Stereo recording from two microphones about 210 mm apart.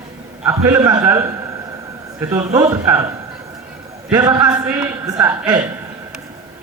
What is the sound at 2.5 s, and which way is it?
Speech, 15° right (ahead or behind).